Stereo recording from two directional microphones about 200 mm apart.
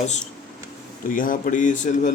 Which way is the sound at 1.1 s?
40° left (ahead or behind).